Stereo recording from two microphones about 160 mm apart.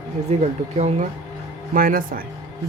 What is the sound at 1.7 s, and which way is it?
Speech, 60° right (ahead or behind).